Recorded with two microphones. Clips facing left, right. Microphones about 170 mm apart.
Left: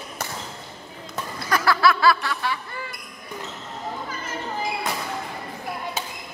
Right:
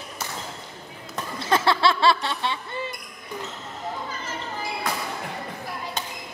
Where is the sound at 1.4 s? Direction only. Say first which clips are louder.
Left 1 dB; 25° right (ahead or behind).